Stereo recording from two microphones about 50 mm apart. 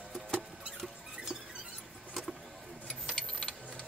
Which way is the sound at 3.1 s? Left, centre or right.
Centre.